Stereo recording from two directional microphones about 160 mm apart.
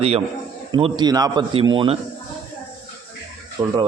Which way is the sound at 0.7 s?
25° right (ahead or behind).